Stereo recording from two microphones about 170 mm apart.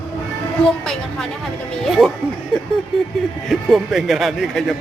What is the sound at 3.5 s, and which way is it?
Speech, centre (ahead or behind).